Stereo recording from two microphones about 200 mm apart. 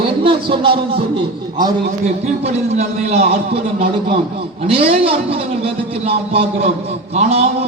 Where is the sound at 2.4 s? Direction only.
30° right (ahead or behind).